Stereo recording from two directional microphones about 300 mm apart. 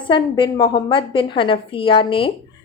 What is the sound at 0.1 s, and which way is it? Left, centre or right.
A woman's voice, centre.